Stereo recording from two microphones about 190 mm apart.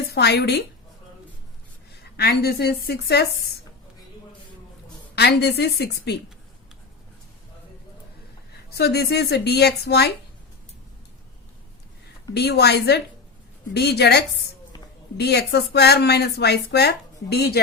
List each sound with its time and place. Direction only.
0.1 s a woman's voice: 60° left (ahead or behind)
2.1 s speech: 55° left (ahead or behind)
5.1 s speech: 60° left (ahead or behind)
8.7 s speech: 60° left (ahead or behind)
12.3 s speech: 60° left (ahead or behind)